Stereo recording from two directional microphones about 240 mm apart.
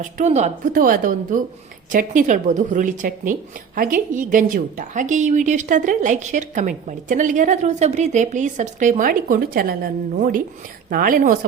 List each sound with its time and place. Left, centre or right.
0.0 s a woman's voice: right